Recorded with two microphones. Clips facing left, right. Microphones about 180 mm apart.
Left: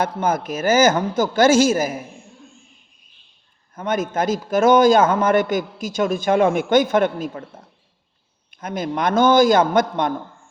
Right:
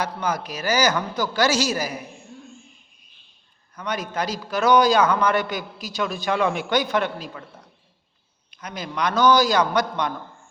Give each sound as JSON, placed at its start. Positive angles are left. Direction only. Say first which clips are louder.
{"t": 0.0, "sound": "a man's voice", "louder": "left 5 dB", "side_deg": 50}
{"t": 3.8, "sound": "a man's voice", "louder": "left 6 dB", "side_deg": 50}
{"t": 8.4, "sound": "a man's voice", "louder": "left 8 dB", "side_deg": 50}